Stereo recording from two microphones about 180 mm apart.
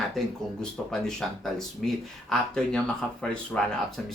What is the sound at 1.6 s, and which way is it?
Speech, centre (ahead or behind).